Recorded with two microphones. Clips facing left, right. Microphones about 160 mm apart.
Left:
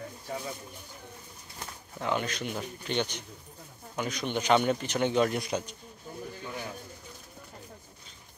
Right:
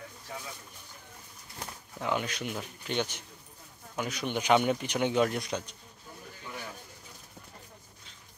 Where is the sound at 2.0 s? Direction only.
10° right (ahead or behind).